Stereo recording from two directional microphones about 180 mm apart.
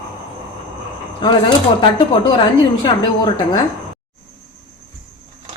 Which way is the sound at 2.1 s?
25° left (ahead or behind).